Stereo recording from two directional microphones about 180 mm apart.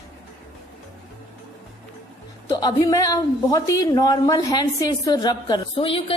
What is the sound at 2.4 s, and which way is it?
A woman's voice, 20° left (ahead or behind).